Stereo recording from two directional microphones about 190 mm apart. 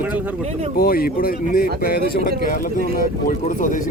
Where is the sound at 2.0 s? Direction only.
55° right (ahead or behind).